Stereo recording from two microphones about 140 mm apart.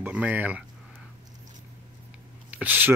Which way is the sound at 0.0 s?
10° right (ahead or behind).